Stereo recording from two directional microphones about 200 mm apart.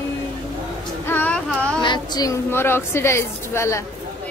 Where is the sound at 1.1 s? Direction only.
5° left (ahead or behind).